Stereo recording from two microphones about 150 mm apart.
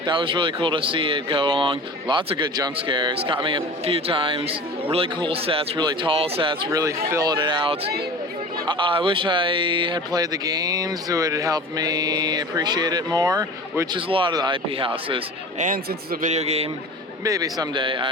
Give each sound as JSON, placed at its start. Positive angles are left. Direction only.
{"t": 0.0, "sound": "speech", "side_deg": -35}
{"t": 6.7, "sound": "speech", "side_deg": -20}
{"t": 7.3, "sound": "speech", "side_deg": -35}
{"t": 14.1, "sound": "speech", "side_deg": -35}
{"t": 15.5, "sound": "a man's voice", "side_deg": -65}
{"t": 16.3, "sound": "a man's voice", "side_deg": -45}
{"t": 17.2, "sound": "speech", "side_deg": -25}